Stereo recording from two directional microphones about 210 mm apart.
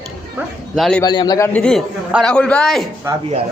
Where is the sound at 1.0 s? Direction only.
20° left (ahead or behind).